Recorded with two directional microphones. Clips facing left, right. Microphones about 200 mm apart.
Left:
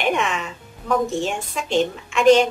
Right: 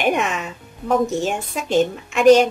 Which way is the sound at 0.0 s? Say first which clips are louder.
Right 2 dB; 45° right (ahead or behind).